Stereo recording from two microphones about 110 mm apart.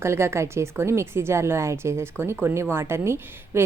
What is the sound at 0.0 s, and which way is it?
Speech, 25° right (ahead or behind).